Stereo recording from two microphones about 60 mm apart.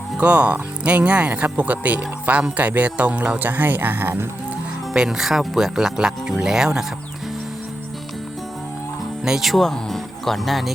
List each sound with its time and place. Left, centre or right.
0.2 s speech: right
4.9 s speech: centre
9.2 s speech: centre